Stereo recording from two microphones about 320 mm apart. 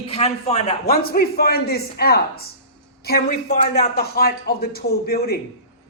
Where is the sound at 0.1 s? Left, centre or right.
Centre.